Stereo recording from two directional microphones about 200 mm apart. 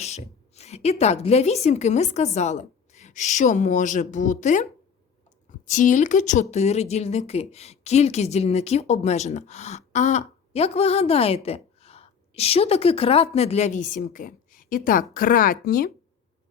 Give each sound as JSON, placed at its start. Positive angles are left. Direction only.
{"t": 0.0, "sound": "speech", "side_deg": 35}
{"t": 5.7, "sound": "speech", "side_deg": 40}